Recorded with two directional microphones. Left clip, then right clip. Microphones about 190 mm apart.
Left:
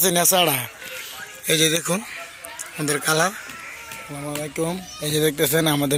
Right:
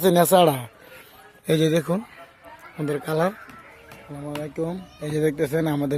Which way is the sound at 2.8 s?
15° right (ahead or behind).